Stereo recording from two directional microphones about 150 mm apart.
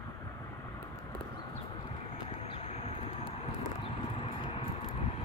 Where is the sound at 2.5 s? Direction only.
40° left (ahead or behind).